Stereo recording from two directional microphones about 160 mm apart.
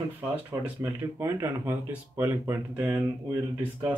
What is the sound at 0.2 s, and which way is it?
Speech, 10° right (ahead or behind).